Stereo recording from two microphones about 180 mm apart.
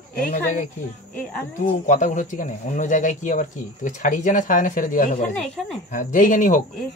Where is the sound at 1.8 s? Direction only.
45° left (ahead or behind).